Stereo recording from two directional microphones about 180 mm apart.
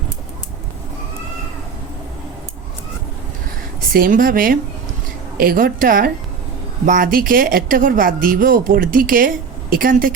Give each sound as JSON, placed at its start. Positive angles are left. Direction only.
{"t": 3.9, "sound": "speech", "side_deg": -50}